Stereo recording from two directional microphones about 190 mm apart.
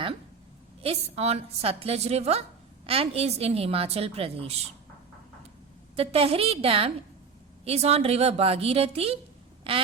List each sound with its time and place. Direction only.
0.8 s a woman's voice: 30° right (ahead or behind)
6.0 s a woman's voice: 30° right (ahead or behind)
9.7 s duck: 30° right (ahead or behind)